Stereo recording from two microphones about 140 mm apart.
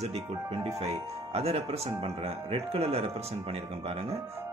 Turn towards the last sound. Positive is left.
turn(degrees=-45)  # may be behind; listen again after turning